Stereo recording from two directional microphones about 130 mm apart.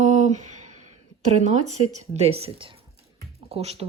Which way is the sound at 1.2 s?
65° right (ahead or behind).